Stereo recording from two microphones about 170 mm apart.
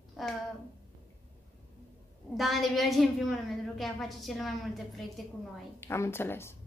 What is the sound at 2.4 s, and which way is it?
A woman's voice, centre (ahead or behind).